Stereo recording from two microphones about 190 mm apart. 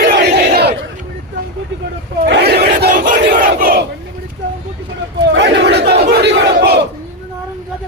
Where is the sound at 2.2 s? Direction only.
55° right (ahead or behind).